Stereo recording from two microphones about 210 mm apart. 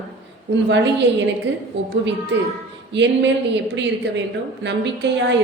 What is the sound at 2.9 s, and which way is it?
Speech, 55° right (ahead or behind).